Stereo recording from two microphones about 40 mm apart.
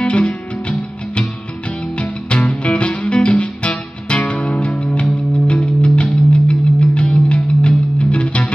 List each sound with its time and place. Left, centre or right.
0.0 s music: left